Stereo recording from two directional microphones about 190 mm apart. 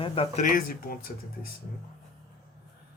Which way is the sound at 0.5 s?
50° left (ahead or behind).